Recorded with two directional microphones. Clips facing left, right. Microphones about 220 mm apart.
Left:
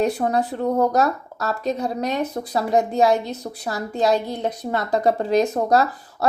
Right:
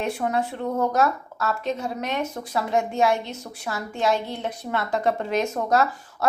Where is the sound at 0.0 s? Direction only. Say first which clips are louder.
Left 5 dB; 35° left (ahead or behind).